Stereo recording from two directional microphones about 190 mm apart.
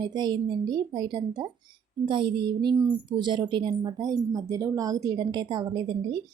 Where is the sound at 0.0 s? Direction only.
20° right (ahead or behind).